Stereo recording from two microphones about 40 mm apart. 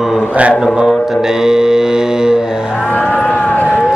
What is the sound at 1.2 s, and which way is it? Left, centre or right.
Mantra, centre.